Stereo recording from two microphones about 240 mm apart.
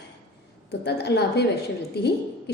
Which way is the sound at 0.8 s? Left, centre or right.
Left.